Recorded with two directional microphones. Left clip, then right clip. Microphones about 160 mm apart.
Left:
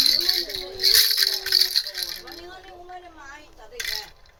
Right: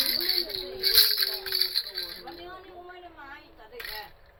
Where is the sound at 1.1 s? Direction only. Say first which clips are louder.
Left 7 dB; 20° left (ahead or behind).